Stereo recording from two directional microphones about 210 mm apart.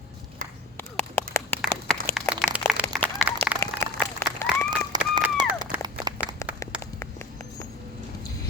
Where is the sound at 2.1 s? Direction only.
Centre (ahead or behind).